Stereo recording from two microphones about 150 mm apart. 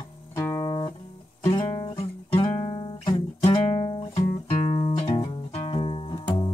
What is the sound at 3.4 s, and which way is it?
Music, 40° left (ahead or behind).